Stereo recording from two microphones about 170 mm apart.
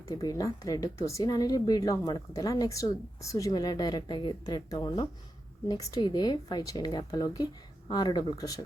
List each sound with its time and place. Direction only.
0.1 s speech: 20° left (ahead or behind)